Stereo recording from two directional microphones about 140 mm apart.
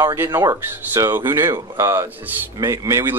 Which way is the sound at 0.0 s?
20° right (ahead or behind).